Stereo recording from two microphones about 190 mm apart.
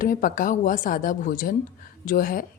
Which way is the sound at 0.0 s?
45° left (ahead or behind).